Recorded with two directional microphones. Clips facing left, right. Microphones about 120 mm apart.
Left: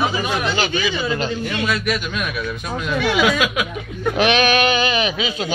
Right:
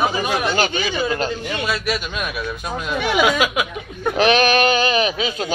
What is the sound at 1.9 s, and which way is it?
Speech, 30° right (ahead or behind).